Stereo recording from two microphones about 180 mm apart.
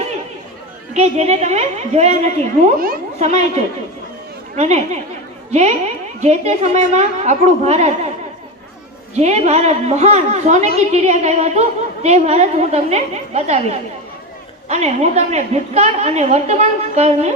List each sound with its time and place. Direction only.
0.9 s a woman's voice: 35° right (ahead or behind)
2.7 s speech: 50° right (ahead or behind)
3.2 s a woman's voice: 40° right (ahead or behind)
9.1 s a woman's voice: 40° right (ahead or behind)